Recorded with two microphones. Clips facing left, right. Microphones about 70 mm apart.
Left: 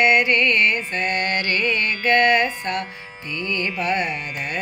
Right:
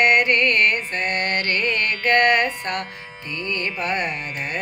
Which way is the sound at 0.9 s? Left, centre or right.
Right.